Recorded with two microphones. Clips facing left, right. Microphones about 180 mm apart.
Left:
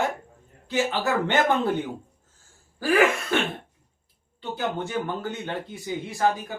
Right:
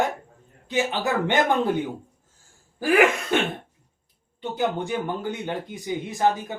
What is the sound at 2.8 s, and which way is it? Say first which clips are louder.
Speech: right 2 dB; 15° right (ahead or behind).